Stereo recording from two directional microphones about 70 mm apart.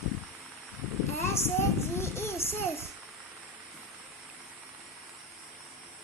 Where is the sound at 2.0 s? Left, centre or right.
Left.